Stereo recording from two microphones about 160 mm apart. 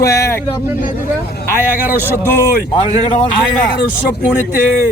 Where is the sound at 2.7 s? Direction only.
40° left (ahead or behind).